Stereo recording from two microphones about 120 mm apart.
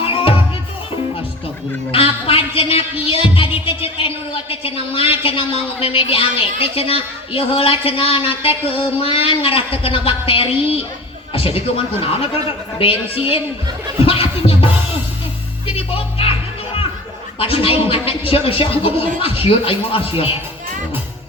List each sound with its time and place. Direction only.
0.0 s music: 50° left (ahead or behind)
1.9 s speech: 50° left (ahead or behind)
14.0 s music: 50° left (ahead or behind)
17.4 s speech: 50° left (ahead or behind)